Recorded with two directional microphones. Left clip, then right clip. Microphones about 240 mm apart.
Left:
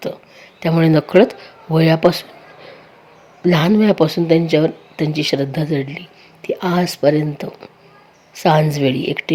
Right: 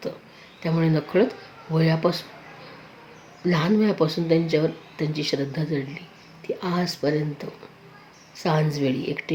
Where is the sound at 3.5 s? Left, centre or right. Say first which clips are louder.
Left 8 dB; left.